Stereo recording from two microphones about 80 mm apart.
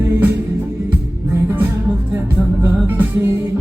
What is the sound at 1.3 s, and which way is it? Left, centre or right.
Music, right.